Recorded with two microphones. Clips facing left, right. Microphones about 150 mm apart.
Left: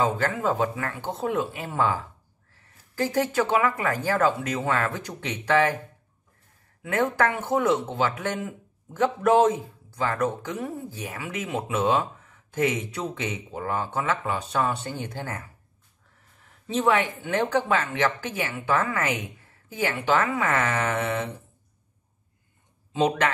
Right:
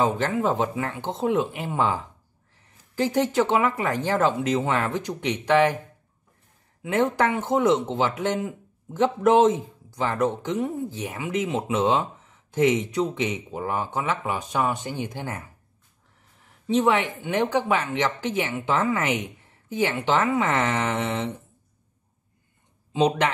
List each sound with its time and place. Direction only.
0.0 s speech: 20° right (ahead or behind)
6.8 s speech: 15° right (ahead or behind)
16.6 s speech: 15° right (ahead or behind)
22.9 s speech: 15° right (ahead or behind)